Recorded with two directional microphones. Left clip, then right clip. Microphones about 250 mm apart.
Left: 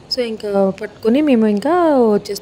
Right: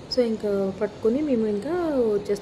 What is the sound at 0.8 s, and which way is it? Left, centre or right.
Speech, left.